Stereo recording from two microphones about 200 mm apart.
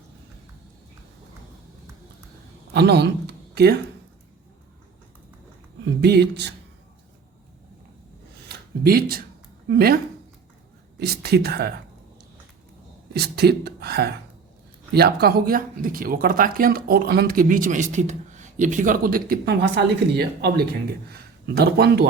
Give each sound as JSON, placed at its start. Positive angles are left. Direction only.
{"t": 2.7, "sound": "speech", "side_deg": -55}
{"t": 5.8, "sound": "speech", "side_deg": -55}
{"t": 8.4, "sound": "a sound", "side_deg": -50}
{"t": 9.6, "sound": "speech", "side_deg": -50}
{"t": 11.0, "sound": "speech", "side_deg": -55}
{"t": 13.1, "sound": "speech", "side_deg": -55}